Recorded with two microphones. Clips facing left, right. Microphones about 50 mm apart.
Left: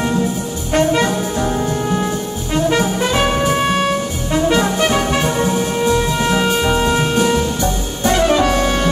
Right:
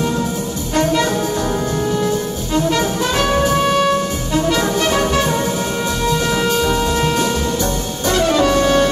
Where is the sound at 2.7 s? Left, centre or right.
Left.